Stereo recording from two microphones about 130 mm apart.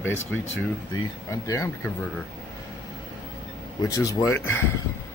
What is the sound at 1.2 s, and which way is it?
Speech, 25° left (ahead or behind).